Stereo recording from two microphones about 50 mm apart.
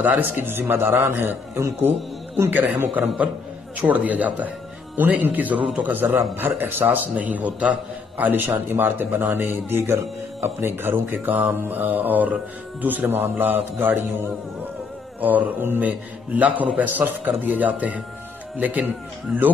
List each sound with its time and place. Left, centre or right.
0.0 s a man's voice: right
0.4 s a man's voice: right
1.0 s a man's voice: right
2.5 s a man's voice: right
8.2 s a man's voice: right
15.1 s a man's voice: right